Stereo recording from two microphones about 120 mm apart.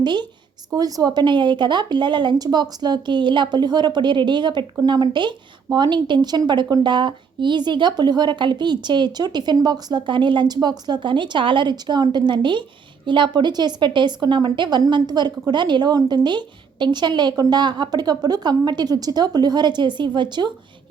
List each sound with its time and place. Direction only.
0.0 s a woman's voice: 40° right (ahead or behind)